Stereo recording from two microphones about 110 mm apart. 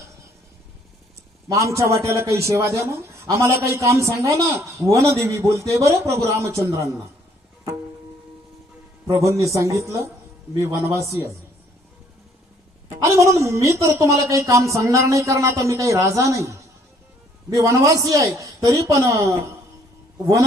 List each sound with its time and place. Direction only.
1.5 s a man's voice: 25° right (ahead or behind)
9.0 s a man's voice: 25° right (ahead or behind)
13.0 s a man's voice: 25° right (ahead or behind)